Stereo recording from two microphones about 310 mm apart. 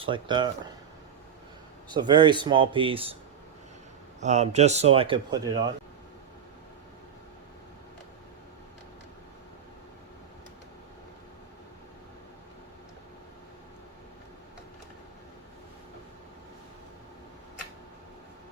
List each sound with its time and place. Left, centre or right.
0.0 s speech: centre
1.9 s speech: centre
4.2 s speech: right